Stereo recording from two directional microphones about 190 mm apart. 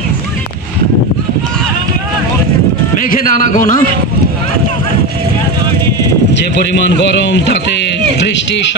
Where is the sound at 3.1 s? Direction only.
45° left (ahead or behind).